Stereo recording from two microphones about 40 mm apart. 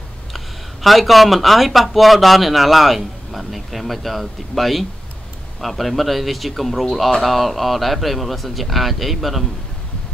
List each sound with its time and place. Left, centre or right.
0.8 s speech: centre